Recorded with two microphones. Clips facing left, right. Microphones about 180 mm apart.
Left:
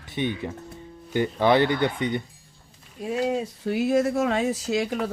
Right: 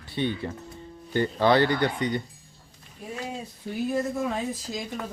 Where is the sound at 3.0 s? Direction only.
80° left.